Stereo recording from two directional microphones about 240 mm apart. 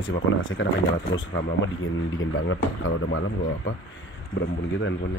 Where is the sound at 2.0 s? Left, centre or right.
Left.